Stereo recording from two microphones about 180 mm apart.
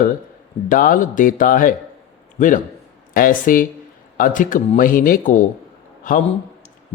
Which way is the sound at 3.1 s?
50° left (ahead or behind).